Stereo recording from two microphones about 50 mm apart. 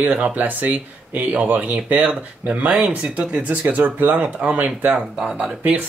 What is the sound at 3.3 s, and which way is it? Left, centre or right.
Speech, right.